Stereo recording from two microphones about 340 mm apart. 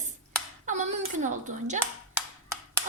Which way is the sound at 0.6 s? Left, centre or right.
Right.